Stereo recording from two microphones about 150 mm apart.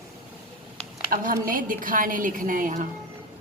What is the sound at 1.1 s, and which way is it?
A woman's voice, 65° right (ahead or behind).